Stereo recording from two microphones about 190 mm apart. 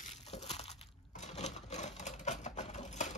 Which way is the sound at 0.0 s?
35° left (ahead or behind).